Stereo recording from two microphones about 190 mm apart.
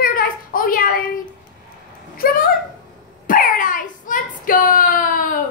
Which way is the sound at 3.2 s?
45° left (ahead or behind).